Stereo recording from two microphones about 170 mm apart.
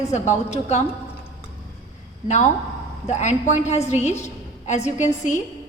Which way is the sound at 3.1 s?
45° left (ahead or behind).